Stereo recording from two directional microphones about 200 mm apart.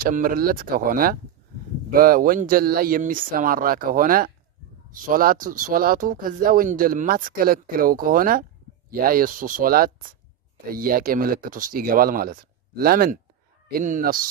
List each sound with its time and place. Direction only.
0.0 s speech: 45° right (ahead or behind)